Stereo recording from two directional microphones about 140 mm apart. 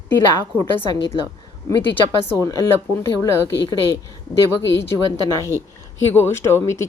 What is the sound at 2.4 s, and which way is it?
Speech, 20° left (ahead or behind).